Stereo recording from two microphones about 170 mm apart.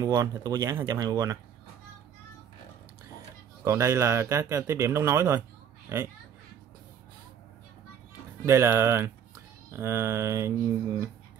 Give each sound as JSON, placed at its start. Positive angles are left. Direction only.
{"t": 0.0, "sound": "speech", "side_deg": -20}
{"t": 3.6, "sound": "speech", "side_deg": -15}
{"t": 8.5, "sound": "speech", "side_deg": -15}